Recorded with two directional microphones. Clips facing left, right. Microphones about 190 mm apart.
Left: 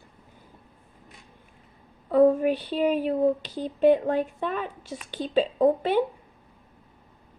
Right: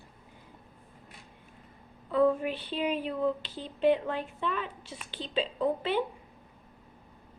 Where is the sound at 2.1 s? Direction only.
45° left (ahead or behind).